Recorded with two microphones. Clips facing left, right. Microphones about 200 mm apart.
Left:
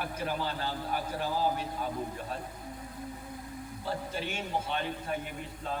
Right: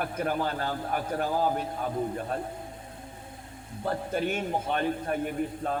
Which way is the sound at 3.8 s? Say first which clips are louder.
Right 7 dB; 50° right (ahead or behind).